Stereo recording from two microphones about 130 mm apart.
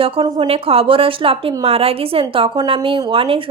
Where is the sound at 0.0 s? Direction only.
45° right (ahead or behind).